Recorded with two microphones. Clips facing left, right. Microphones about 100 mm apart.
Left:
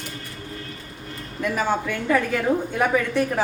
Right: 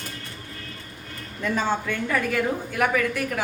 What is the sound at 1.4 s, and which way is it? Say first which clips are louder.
A woman's voice: left 1 dB; 10° left (ahead or behind).